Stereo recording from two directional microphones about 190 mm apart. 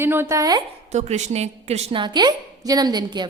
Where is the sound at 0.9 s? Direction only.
35° right (ahead or behind).